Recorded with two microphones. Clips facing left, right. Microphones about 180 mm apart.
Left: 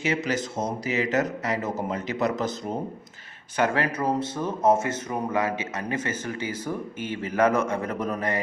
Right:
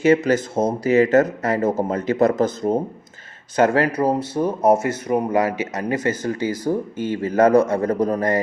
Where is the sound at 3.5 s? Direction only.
40° right (ahead or behind).